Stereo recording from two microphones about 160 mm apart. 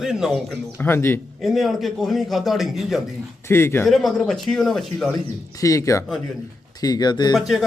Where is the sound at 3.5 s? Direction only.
15° left (ahead or behind).